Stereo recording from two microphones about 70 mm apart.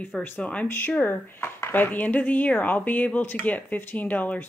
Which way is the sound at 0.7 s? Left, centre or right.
Left.